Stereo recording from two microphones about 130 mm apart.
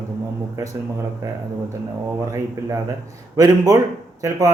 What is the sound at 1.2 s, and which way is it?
Speech, 20° right (ahead or behind).